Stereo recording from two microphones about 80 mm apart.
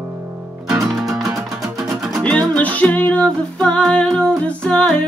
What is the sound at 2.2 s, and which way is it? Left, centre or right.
Music, centre.